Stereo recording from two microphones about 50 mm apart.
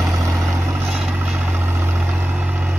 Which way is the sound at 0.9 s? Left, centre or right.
Centre.